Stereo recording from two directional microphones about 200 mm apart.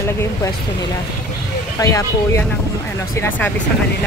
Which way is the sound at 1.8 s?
15° left (ahead or behind).